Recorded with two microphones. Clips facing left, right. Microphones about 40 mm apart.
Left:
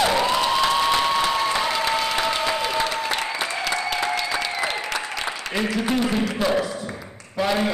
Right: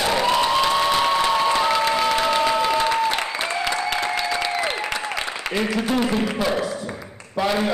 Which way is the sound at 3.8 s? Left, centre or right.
Centre.